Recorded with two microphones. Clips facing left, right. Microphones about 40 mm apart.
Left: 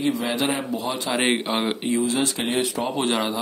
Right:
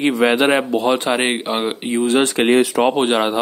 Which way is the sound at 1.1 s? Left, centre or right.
Centre.